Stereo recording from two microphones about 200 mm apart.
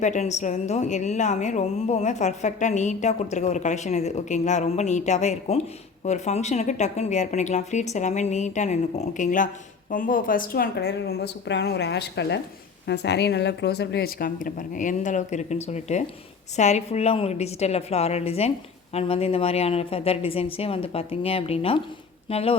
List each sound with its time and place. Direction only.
0.0 s a woman's voice: 35° left (ahead or behind)